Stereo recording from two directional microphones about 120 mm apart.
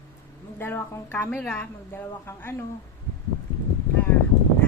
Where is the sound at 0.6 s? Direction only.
20° left (ahead or behind).